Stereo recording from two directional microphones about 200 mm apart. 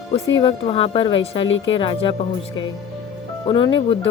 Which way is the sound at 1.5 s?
70° left (ahead or behind).